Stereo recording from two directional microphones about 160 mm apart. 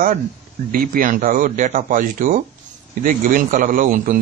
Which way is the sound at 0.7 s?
60° right (ahead or behind).